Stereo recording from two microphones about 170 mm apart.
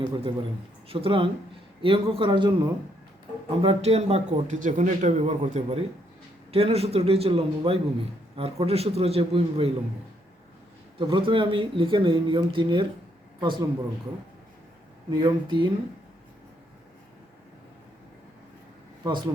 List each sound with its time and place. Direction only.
0.0 s a man's voice: 25° right (ahead or behind)
3.6 s a man's voice: 35° right (ahead or behind)
10.9 s speech: 30° right (ahead or behind)
15.1 s speech: 25° right (ahead or behind)
19.0 s speech: 25° right (ahead or behind)